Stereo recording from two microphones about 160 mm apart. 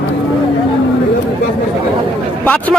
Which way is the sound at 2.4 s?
10° left (ahead or behind).